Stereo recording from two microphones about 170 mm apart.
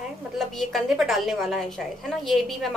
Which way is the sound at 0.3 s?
Centre (ahead or behind).